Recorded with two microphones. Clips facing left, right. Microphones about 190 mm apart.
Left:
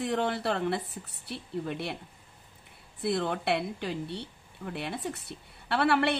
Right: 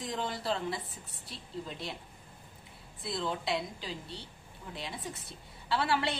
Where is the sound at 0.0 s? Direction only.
65° left (ahead or behind).